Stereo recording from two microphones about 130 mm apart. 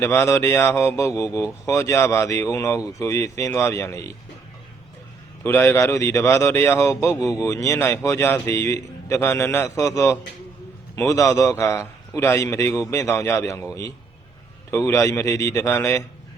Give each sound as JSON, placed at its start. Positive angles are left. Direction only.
{"t": 0.0, "sound": "a man's voice", "side_deg": 20}
{"t": 5.4, "sound": "a man's voice", "side_deg": 15}
{"t": 14.7, "sound": "a man's voice", "side_deg": 20}